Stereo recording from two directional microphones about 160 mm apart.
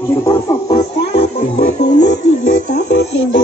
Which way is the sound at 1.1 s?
40° left (ahead or behind).